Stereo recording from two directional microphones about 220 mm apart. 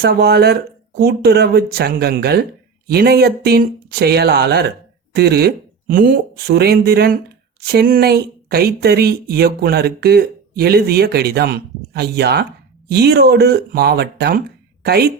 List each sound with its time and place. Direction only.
0.0 s speech: 45° right (ahead or behind)